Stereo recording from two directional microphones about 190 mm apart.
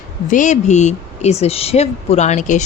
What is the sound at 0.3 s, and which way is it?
Speech, 40° left (ahead or behind).